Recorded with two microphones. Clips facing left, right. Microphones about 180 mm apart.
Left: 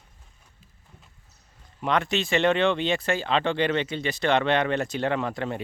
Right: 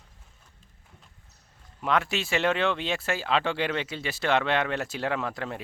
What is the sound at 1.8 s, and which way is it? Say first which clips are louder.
Speech: left 2 dB; 5° right (ahead or behind).